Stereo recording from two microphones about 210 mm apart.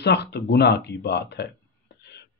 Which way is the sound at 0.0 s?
55° left (ahead or behind).